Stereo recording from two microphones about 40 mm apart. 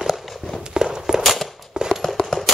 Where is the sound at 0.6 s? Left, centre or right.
Centre.